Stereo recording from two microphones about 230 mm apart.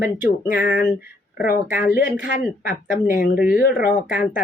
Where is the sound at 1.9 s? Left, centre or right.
Left.